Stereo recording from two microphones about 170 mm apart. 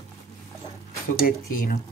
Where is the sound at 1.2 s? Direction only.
60° left (ahead or behind).